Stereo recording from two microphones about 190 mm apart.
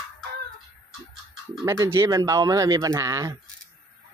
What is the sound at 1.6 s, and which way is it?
Speech, 15° right (ahead or behind).